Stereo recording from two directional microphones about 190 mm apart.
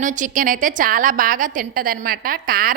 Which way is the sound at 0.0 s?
40° right (ahead or behind).